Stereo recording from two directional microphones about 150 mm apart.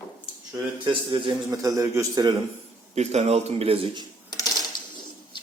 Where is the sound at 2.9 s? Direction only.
45° right (ahead or behind).